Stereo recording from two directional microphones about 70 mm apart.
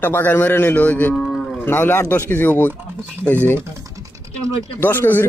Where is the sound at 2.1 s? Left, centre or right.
Left.